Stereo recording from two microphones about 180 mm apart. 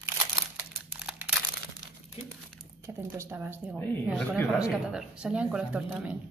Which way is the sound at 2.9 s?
15° right (ahead or behind).